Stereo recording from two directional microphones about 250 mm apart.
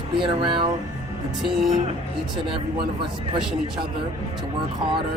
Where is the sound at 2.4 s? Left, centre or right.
Centre.